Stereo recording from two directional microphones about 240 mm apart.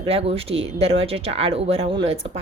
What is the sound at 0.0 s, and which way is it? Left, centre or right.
A woman's voice, right.